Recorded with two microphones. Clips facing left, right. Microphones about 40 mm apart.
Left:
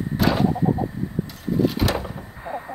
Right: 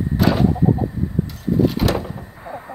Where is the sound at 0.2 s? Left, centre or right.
Centre.